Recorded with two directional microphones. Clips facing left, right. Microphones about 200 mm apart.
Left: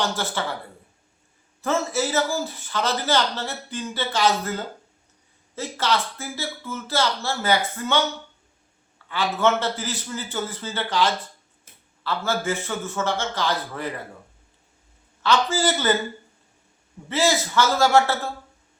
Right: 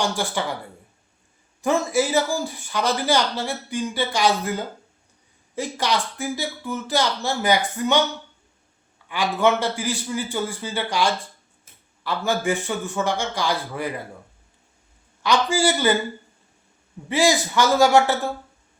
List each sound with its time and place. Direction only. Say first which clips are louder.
0.0 s speech: right 2 dB; 15° right (ahead or behind)
1.6 s speech: right 3 dB; 15° right (ahead or behind)
9.0 s speech: right 2 dB; 15° right (ahead or behind)
15.2 s speech: right 1 dB; 15° right (ahead or behind)
17.1 s speech: right 2 dB; 15° right (ahead or behind)